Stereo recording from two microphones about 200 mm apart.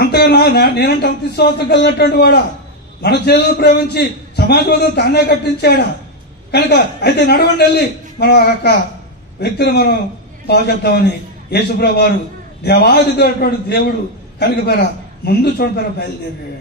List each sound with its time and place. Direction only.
0.0 s a man's voice: 55° left (ahead or behind)